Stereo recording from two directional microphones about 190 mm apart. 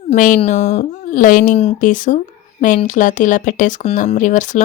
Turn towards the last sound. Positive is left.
turn(degrees=40)  # may be behind; listen again after turning